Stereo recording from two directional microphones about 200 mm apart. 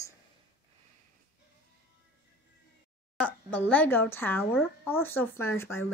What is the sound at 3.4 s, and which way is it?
Speech, 5° left (ahead or behind).